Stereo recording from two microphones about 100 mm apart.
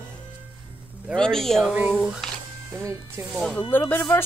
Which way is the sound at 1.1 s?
5° left (ahead or behind).